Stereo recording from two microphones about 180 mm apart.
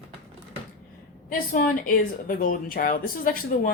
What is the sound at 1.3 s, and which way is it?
Speech, 50° left (ahead or behind).